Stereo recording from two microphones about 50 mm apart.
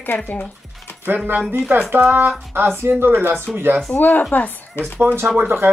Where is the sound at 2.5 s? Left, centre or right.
Right.